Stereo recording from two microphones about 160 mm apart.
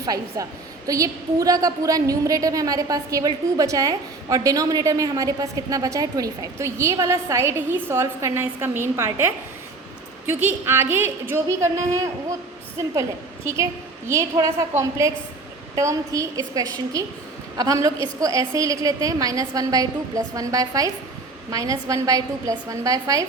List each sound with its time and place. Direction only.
0.0 s a woman's voice: 20° right (ahead or behind)